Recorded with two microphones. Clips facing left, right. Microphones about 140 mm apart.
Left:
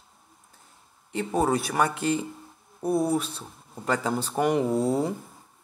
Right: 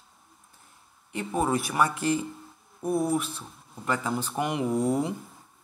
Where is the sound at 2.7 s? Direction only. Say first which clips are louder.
Left 2 dB; 35° left (ahead or behind).